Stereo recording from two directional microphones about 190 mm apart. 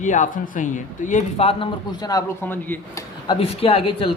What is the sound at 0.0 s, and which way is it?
Speech, 40° left (ahead or behind).